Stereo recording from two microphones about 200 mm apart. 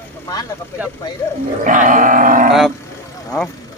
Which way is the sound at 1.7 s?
40° right (ahead or behind).